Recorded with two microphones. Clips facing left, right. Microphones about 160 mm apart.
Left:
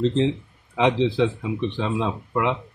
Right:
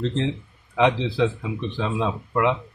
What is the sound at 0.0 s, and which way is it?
Speech, 20° left (ahead or behind).